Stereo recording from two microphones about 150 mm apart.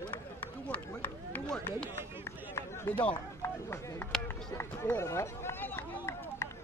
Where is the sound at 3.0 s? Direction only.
15° left (ahead or behind).